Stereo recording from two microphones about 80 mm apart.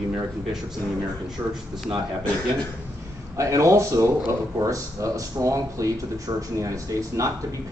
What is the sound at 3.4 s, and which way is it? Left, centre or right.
A man's voice, right.